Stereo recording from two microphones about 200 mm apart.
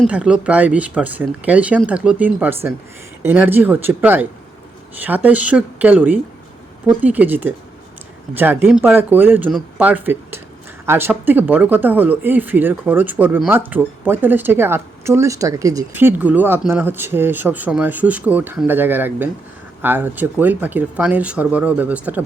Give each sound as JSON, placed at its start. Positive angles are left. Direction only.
{"t": 0.0, "sound": "speech", "side_deg": -5}